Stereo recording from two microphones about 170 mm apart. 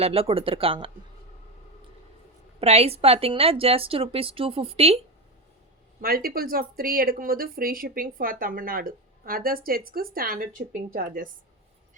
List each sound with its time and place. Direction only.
0.0 s speech: 35° right (ahead or behind)
2.6 s speech: 35° right (ahead or behind)
6.0 s speech: 60° right (ahead or behind)